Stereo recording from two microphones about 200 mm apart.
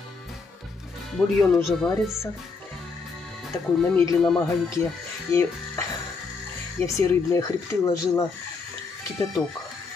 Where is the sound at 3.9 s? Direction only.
15° left (ahead or behind).